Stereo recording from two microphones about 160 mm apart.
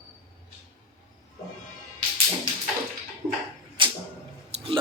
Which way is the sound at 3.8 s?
30° right (ahead or behind).